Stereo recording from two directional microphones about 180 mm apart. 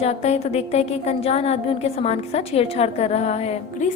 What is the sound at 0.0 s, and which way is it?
A woman's voice, 35° left (ahead or behind).